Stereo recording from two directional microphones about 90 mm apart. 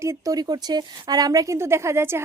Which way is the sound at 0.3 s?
50° right (ahead or behind).